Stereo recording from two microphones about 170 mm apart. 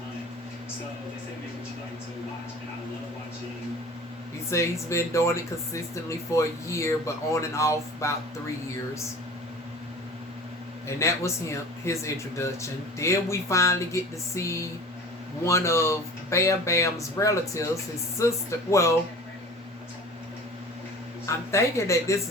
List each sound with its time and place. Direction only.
4.5 s a man's voice: 15° left (ahead or behind)
10.8 s a man's voice: 15° left (ahead or behind)
21.2 s a man's voice: 15° left (ahead or behind)